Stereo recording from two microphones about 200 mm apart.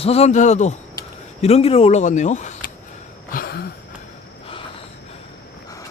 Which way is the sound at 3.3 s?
50° left (ahead or behind).